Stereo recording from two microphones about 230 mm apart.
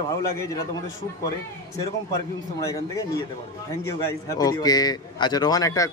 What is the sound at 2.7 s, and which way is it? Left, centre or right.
A man's voice, centre.